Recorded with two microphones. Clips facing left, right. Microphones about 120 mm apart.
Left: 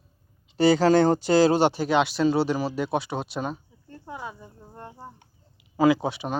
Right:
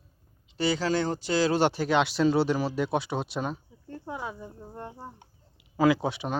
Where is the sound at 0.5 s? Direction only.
45° left (ahead or behind).